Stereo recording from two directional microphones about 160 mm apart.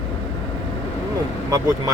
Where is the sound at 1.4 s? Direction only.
20° right (ahead or behind).